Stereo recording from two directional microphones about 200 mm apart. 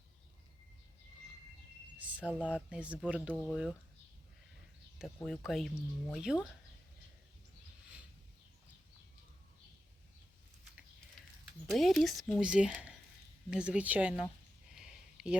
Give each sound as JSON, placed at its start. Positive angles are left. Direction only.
{"t": 2.0, "sound": "speech", "side_deg": -5}
{"t": 4.9, "sound": "speech", "side_deg": 0}
{"t": 11.7, "sound": "speech", "side_deg": 0}
{"t": 14.8, "sound": "a sound", "side_deg": -5}